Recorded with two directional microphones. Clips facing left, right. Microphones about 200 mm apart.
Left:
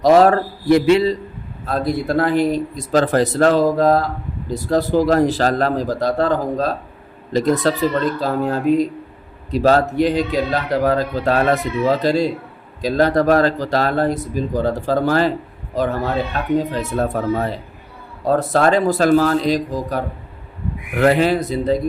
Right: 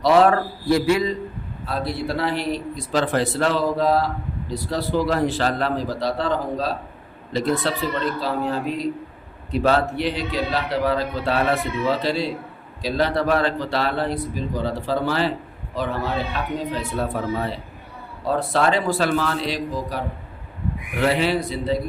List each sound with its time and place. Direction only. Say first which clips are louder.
0.0 s a man's voice: left 4 dB; 40° left (ahead or behind)
0.6 s a man's voice: left 6 dB; 20° left (ahead or behind)
1.6 s a man's voice: left 6 dB; 45° left (ahead or behind)